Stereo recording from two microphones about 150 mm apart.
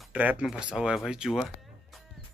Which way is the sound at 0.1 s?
10° right (ahead or behind).